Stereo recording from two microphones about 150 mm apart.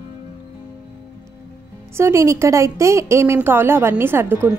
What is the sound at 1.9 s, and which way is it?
A woman's voice, 20° right (ahead or behind).